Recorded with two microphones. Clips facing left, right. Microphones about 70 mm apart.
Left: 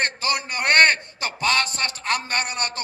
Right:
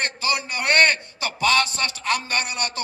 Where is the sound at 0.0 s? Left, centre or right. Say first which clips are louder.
Even; left.